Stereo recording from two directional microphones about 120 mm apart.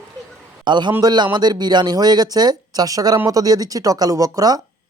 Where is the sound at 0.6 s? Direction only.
40° right (ahead or behind).